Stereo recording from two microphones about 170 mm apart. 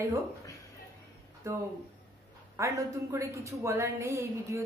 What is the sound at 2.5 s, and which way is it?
A woman's voice, 15° right (ahead or behind).